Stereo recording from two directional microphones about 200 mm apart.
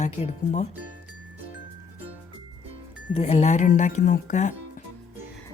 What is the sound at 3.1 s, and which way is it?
Speech, 35° left (ahead or behind).